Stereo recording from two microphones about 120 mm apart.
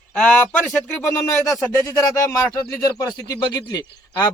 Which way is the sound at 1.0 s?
25° left (ahead or behind).